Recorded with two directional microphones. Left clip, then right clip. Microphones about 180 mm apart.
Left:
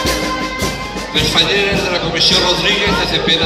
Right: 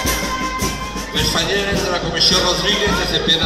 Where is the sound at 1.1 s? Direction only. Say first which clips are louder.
Left 5 dB; 45° left (ahead or behind).